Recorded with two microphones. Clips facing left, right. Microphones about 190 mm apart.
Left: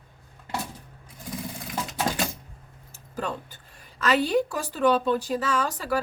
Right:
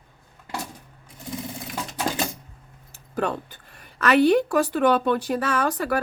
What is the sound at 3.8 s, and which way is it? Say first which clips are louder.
A woman's voice: right 5 dB; 60° right (ahead or behind).